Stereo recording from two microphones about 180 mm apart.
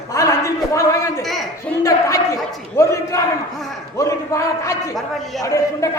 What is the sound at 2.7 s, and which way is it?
A man's voice, 15° left (ahead or behind).